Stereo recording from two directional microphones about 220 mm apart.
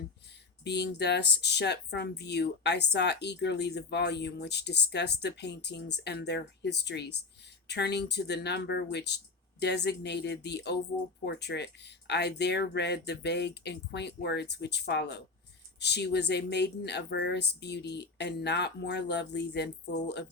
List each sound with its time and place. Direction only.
0.6 s speech: 50° left (ahead or behind)